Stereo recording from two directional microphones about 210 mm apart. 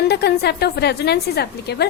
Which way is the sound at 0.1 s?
50° left (ahead or behind).